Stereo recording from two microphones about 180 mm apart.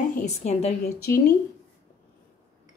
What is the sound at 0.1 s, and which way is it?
Speech, 45° left (ahead or behind).